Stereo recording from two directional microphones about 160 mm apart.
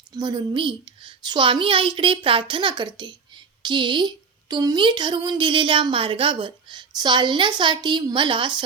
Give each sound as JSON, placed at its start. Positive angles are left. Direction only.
{"t": 0.1, "sound": "a woman's voice", "side_deg": -25}